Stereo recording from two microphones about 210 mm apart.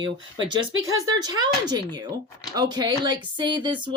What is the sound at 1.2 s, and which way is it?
Speech, 20° right (ahead or behind).